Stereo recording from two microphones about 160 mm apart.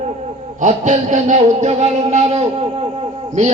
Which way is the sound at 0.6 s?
50° right (ahead or behind).